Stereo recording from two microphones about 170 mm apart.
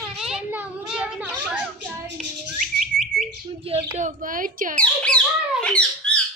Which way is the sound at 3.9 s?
50° right (ahead or behind).